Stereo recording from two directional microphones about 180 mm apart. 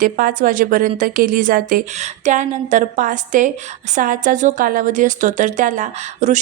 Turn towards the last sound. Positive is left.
turn(degrees=-40)  # may be behind; listen again after turning